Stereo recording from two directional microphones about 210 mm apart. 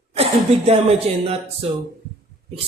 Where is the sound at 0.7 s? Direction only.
30° right (ahead or behind).